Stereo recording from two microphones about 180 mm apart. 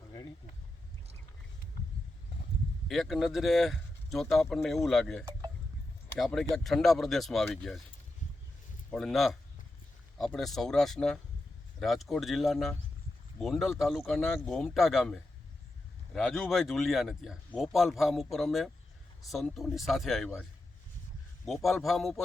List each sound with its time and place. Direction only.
2.8 s speech: centre (ahead or behind)
8.9 s speech: centre (ahead or behind)